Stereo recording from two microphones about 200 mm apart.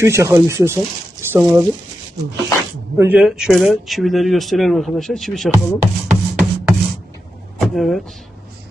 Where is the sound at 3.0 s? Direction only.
5° right (ahead or behind).